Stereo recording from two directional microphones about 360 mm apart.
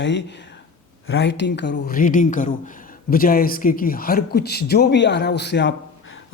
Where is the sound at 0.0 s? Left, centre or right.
Left.